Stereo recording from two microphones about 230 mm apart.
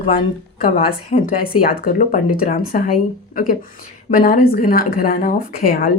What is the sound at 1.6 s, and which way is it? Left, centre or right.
Speech, left.